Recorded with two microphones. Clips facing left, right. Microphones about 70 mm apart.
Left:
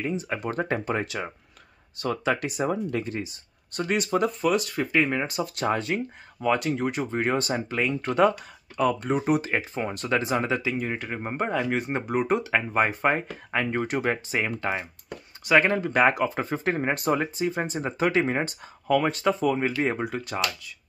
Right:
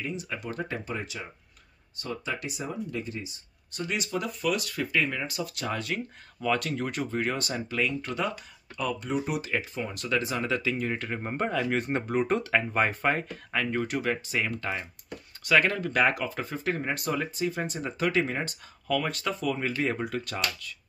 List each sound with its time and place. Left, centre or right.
0.0 s speech: left
11.7 s speech: centre